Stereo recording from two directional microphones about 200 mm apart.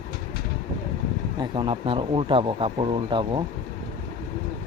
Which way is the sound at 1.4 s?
25° right (ahead or behind).